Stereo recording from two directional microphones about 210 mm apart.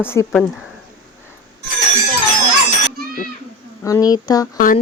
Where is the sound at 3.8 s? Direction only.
15° left (ahead or behind).